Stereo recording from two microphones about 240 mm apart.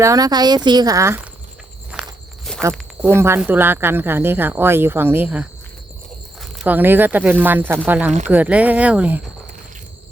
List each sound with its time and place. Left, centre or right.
0.0 s speech: centre
1.9 s walk: centre
2.7 s a sound: centre
3.2 s speech: centre